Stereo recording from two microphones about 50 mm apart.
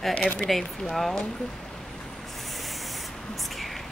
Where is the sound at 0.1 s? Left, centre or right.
Left.